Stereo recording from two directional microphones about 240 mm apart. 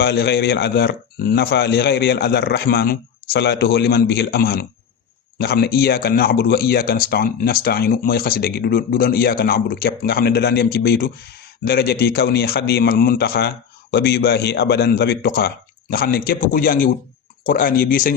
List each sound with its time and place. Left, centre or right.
0.0 s speech: left